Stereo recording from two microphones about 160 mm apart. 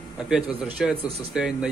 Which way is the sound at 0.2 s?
5° right (ahead or behind).